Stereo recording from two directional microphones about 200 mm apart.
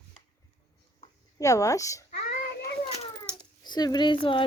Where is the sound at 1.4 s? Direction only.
15° left (ahead or behind).